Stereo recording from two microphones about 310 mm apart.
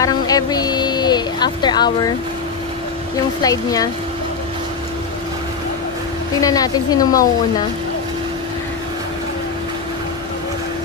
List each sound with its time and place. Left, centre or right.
0.0 s a sound: centre
3.4 s a woman's voice: centre
6.4 s a woman's voice: centre